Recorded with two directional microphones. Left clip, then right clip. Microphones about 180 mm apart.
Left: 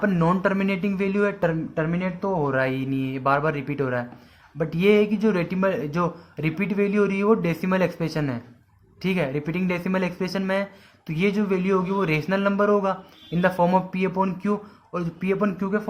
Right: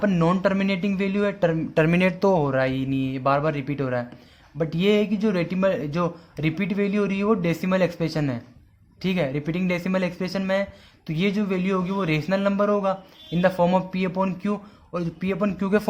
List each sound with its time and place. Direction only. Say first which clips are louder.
0.0 s speech: even; 30° right (ahead or behind)
1.7 s speech: right 6 dB; 60° right (ahead or behind)
2.4 s speech: even; 30° right (ahead or behind)